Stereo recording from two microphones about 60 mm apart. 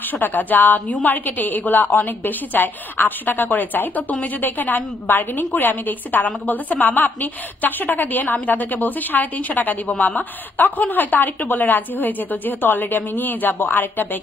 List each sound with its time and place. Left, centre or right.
0.0 s a woman's voice: left